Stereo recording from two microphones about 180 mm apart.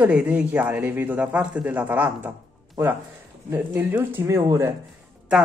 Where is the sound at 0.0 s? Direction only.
5° right (ahead or behind).